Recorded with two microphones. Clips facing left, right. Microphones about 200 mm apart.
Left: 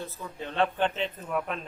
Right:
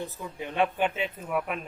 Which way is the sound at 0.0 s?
15° right (ahead or behind).